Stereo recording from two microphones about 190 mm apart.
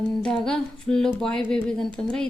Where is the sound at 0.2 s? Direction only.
5° left (ahead or behind).